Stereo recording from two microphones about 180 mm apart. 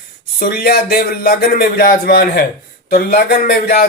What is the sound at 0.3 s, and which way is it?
Speech, 55° left (ahead or behind).